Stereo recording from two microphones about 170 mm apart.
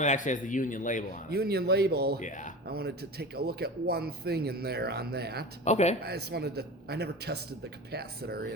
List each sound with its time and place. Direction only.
0.0 s a man's voice: 45° left (ahead or behind)
1.3 s a man's voice: 70° right (ahead or behind)
2.1 s a man's voice: 45° left (ahead or behind)
2.6 s a man's voice: 70° right (ahead or behind)
5.6 s speech: 40° left (ahead or behind)
6.0 s a man's voice: 70° right (ahead or behind)